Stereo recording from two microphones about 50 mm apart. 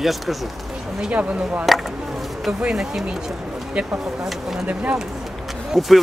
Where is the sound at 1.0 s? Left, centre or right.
Right.